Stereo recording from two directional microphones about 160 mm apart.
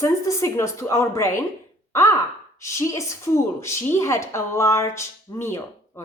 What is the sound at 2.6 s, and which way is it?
A woman's voice, 20° left (ahead or behind).